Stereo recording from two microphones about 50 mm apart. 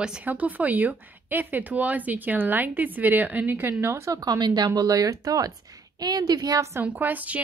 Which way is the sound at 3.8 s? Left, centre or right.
Right.